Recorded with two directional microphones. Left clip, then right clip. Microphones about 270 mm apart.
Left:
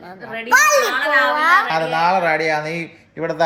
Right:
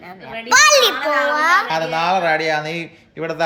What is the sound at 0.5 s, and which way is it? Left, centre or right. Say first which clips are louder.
Speech: right 2 dB; right.